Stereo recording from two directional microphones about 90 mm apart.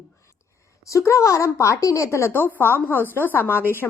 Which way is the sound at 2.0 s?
25° left (ahead or behind).